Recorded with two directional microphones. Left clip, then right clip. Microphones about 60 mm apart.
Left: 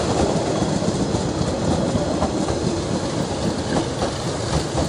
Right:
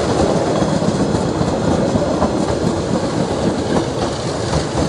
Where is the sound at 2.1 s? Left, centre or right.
Right.